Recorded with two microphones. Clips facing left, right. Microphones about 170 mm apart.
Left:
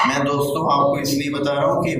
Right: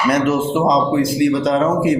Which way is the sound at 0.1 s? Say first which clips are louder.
Right 3 dB; 50° right (ahead or behind).